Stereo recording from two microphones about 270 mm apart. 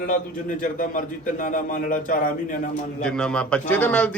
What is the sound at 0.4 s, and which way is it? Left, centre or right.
A man's voice, left.